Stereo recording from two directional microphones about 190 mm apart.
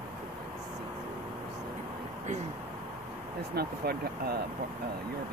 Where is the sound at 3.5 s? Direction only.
55° right (ahead or behind).